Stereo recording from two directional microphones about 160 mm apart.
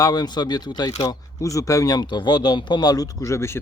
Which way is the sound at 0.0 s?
25° left (ahead or behind).